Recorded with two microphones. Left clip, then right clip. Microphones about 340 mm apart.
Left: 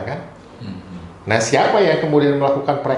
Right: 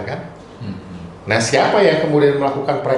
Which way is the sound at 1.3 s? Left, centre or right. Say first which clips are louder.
Even; left.